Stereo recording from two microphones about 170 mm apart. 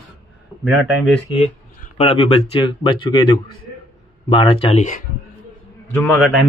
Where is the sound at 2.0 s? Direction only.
35° left (ahead or behind).